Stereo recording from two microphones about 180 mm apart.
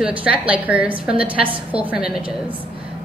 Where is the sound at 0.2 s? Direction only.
10° right (ahead or behind).